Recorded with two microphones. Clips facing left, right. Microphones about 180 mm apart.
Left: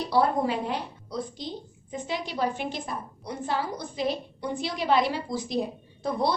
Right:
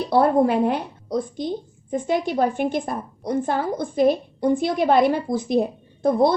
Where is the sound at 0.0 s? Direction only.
55° right (ahead or behind).